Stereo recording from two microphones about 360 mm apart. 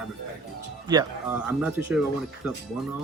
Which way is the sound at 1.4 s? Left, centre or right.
Centre.